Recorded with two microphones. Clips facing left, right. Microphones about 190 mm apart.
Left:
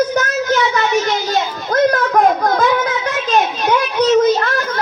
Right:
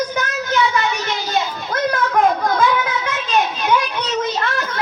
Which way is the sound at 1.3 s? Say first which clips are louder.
Left 3 dB; 40° left (ahead or behind).